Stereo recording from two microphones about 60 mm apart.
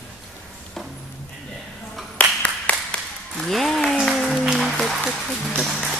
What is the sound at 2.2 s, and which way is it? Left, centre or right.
Clapping, left.